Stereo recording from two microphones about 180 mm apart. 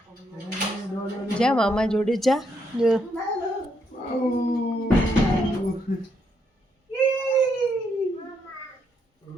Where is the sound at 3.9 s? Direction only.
45° left (ahead or behind).